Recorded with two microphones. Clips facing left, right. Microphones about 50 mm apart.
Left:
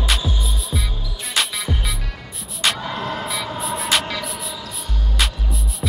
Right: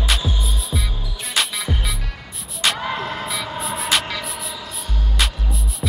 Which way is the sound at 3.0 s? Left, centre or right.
Centre.